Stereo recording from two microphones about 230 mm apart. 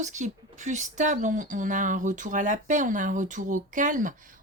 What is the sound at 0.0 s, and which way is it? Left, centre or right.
Speech, right.